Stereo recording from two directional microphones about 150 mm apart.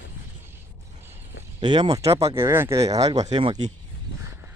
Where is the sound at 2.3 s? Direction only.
15° right (ahead or behind); by 3.6 s 30° right (ahead or behind).